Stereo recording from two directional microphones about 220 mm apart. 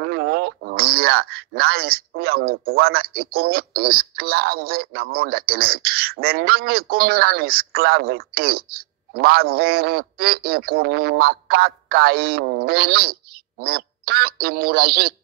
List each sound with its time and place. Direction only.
0.0 s speech: 45° right (ahead or behind)